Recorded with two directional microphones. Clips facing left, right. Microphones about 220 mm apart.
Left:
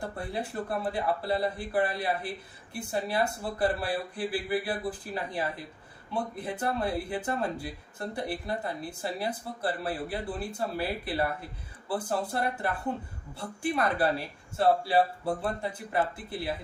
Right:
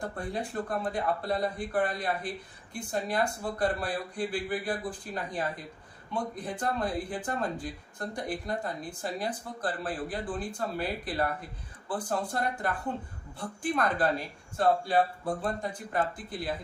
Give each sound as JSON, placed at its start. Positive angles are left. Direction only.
{"t": 0.0, "sound": "speech", "side_deg": 5}